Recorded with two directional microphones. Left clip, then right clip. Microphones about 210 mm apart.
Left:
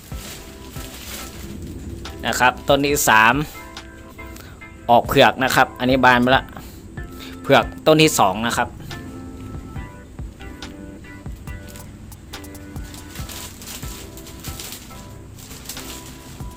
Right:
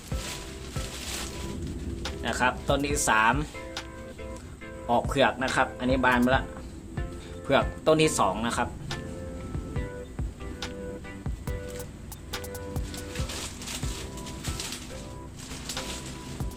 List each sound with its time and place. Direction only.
2.2 s speech: 45° left (ahead or behind)
4.9 s speech: 45° left (ahead or behind)
7.4 s speech: 45° left (ahead or behind)